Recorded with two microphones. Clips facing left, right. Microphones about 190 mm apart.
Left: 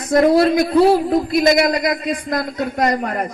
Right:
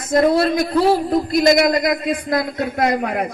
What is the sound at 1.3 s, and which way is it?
A man's voice, centre (ahead or behind).